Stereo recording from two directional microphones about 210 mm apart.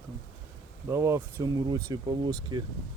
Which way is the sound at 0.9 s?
15° right (ahead or behind).